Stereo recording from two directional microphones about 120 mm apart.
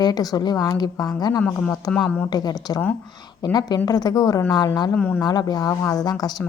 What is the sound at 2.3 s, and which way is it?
Speech, 35° left (ahead or behind).